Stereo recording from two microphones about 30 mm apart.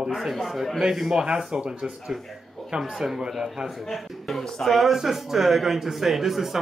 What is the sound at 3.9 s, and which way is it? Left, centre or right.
Speech, centre.